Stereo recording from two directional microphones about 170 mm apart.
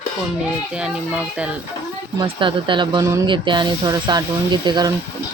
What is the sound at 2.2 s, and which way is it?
Speech, 30° right (ahead or behind).